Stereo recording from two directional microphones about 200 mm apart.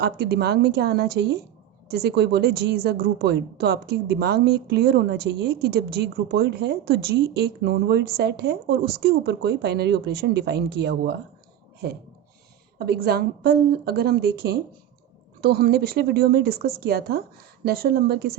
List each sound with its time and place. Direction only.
0.0 s a woman's voice: 55° right (ahead or behind)
12.8 s a woman's voice: 50° right (ahead or behind)